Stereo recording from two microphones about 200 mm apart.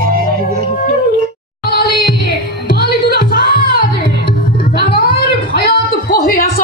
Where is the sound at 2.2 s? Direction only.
50° left (ahead or behind).